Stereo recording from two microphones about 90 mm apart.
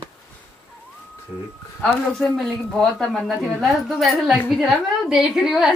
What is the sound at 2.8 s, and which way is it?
A woman's voice, 5° left (ahead or behind).